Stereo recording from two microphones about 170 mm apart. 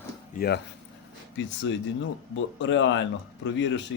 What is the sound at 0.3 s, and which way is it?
Speech, 70° left (ahead or behind).